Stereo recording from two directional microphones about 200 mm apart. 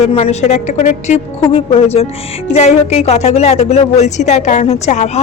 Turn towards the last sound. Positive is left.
turn(degrees=35)  # may be behind; listen again after turning